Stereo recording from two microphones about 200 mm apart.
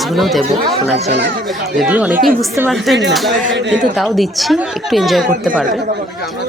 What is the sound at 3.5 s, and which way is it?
Speech, 60° right (ahead or behind).